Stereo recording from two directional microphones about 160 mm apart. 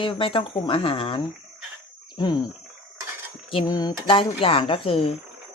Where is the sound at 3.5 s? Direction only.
25° left (ahead or behind).